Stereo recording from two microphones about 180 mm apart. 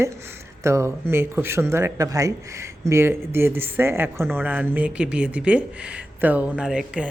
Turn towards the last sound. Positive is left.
turn(degrees=-5)  # may be behind; listen again after turning